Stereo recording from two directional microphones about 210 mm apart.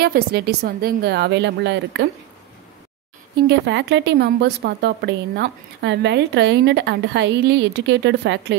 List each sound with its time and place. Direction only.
0.0 s a woman's voice: 45° right (ahead or behind)
3.4 s speech: 55° right (ahead or behind)